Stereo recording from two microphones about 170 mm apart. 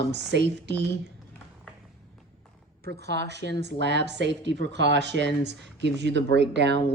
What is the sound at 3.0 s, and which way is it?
Speech, 90° right.